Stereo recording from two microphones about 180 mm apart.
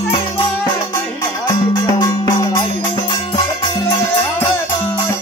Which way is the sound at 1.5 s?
20° left (ahead or behind).